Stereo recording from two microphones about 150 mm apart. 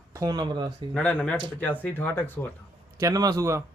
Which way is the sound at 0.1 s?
25° right (ahead or behind).